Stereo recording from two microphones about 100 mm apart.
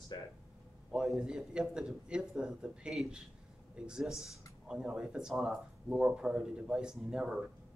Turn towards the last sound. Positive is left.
turn(degrees=-5)  # may be behind; listen again after turning